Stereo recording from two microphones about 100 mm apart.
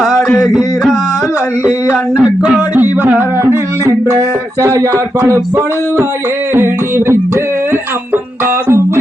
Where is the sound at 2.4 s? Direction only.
10° right (ahead or behind).